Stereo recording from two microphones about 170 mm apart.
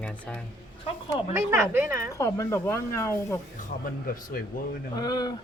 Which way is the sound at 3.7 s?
55° left (ahead or behind).